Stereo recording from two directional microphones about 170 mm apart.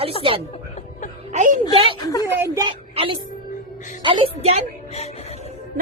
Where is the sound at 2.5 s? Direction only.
30° right (ahead or behind).